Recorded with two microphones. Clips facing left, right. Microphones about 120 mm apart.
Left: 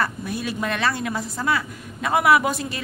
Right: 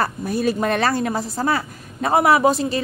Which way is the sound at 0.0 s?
40° right (ahead or behind).